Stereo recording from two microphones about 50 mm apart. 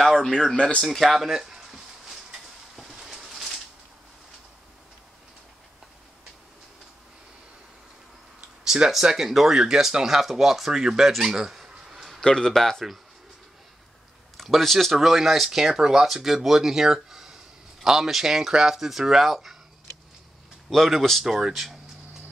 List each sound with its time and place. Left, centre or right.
0.0 s a sound: centre
0.6 s speech: left
0.8 s a sound: centre
8.6 s speech: centre
12.2 s speech: centre
14.3 s speech: centre
20.7 s speech: centre